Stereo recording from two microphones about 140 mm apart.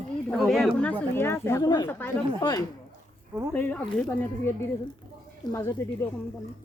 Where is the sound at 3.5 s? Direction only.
10° left (ahead or behind).